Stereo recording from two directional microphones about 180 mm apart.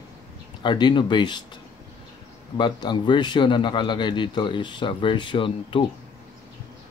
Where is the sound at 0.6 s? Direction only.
25° left (ahead or behind).